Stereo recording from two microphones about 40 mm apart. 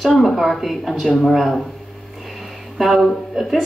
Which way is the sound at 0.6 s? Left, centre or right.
Centre.